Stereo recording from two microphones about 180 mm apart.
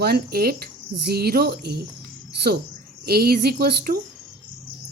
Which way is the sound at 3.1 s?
60° right (ahead or behind).